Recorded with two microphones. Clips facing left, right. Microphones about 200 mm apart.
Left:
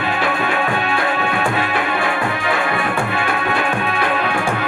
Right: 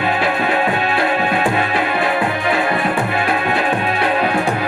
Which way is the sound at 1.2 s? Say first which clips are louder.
Right 2 dB; 30° right (ahead or behind).